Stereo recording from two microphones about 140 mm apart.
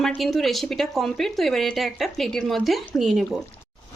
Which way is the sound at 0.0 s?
Centre (ahead or behind).